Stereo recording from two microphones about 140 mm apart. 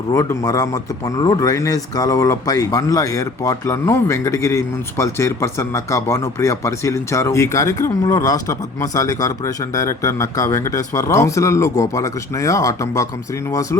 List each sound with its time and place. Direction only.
0.1 s speech: 25° left (ahead or behind)